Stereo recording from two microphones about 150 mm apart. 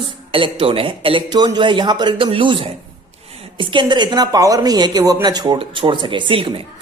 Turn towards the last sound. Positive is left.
turn(degrees=-35)  # may be behind; listen again after turning